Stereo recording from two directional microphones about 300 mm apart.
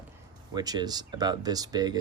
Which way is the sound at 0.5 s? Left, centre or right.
Centre.